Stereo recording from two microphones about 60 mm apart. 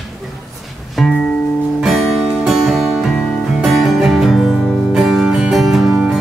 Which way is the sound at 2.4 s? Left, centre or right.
Centre.